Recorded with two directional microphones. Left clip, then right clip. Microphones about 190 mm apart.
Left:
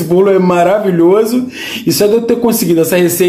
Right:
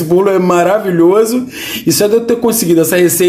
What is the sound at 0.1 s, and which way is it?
A man's voice, 15° right (ahead or behind).